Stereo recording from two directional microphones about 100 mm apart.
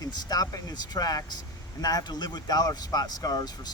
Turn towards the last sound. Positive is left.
turn(degrees=40)  # may be behind; listen again after turning